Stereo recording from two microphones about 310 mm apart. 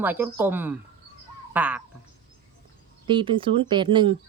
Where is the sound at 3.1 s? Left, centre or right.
Centre.